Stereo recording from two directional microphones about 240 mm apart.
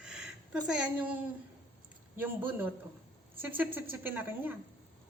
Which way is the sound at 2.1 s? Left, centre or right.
Centre.